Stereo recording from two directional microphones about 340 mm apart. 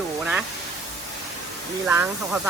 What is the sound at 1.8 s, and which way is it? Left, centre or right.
Speech, centre.